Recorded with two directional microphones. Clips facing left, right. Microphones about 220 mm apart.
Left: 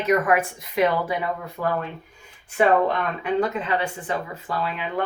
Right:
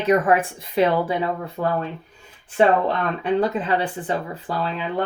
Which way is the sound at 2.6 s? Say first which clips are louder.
Right 1 dB; 30° right (ahead or behind).